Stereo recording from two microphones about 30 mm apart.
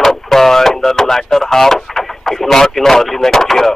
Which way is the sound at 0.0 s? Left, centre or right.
Centre.